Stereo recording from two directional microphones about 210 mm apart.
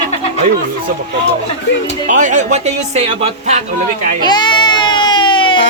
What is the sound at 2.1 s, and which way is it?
Speech, 35° right (ahead or behind).